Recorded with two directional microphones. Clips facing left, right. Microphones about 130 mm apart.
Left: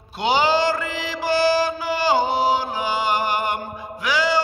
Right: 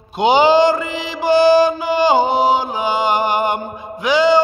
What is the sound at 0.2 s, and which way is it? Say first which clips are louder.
Mantra: right 7 dB; 20° right (ahead or behind).